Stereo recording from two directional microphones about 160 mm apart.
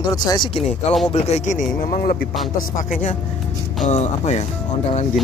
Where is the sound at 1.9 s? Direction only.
65° left (ahead or behind); by 5.0 s 45° left (ahead or behind).